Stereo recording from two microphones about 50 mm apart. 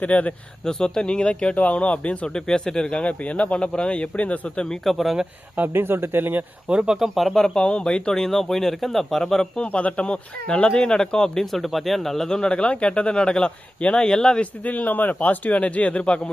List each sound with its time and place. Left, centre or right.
0.0 s speech: left
0.6 s speech: centre
2.2 s speech: centre
4.7 s speech: centre
5.5 s speech: right
6.7 s speech: centre
7.3 s speech: centre
9.6 s speech: left
11.5 s speech: centre
14.6 s speech: left